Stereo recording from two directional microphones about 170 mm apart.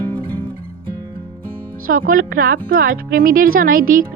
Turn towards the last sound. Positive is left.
turn(degrees=-55)  # may be behind; listen again after turning